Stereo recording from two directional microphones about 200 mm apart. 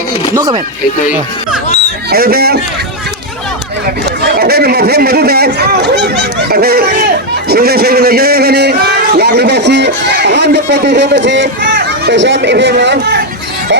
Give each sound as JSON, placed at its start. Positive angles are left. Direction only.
{"t": 2.0, "sound": "speech", "side_deg": -50}
{"t": 3.8, "sound": "a man's voice", "side_deg": -50}